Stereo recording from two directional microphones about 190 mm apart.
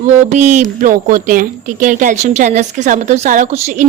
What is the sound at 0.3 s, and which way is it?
Speech, 40° right (ahead or behind).